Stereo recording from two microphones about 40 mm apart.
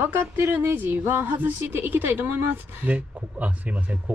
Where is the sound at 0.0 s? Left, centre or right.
Right.